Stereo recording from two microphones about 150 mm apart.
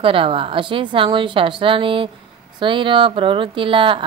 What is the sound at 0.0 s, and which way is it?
Speech, 35° right (ahead or behind).